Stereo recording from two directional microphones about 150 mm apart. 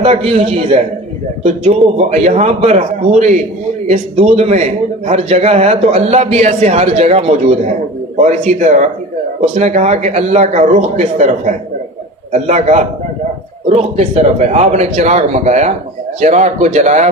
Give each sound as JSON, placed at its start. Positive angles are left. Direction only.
{"t": 0.0, "sound": "a man's voice", "side_deg": -40}
{"t": 1.5, "sound": "a man's voice", "side_deg": -50}